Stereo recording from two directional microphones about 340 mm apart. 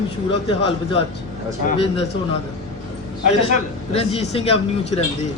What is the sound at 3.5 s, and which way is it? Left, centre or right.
Speech, centre.